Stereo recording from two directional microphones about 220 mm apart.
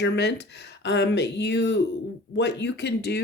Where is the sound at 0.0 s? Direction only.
50° left (ahead or behind).